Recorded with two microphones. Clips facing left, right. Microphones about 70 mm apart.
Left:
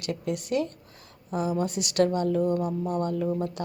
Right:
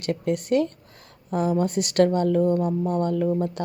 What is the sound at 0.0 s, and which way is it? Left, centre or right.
A woman's voice, right.